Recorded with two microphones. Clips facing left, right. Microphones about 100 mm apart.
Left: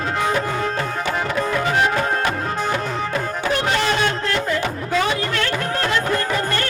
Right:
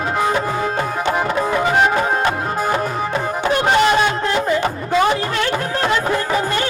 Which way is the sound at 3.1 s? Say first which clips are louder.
Right 4 dB; 20° right (ahead or behind).